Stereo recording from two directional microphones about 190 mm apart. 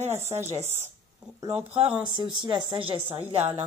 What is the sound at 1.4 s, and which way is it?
Speech, 30° right (ahead or behind).